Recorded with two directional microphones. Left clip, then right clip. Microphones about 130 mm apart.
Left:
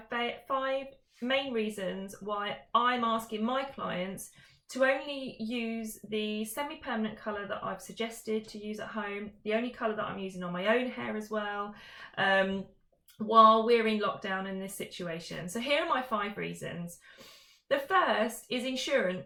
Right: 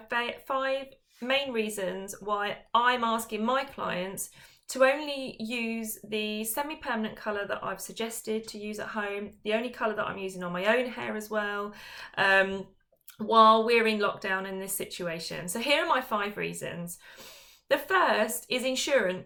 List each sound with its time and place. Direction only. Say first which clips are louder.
0.1 s speech: right 3 dB; 20° right (ahead or behind)